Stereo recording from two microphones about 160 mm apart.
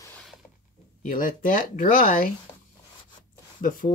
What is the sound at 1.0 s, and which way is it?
Speech, 60° left (ahead or behind).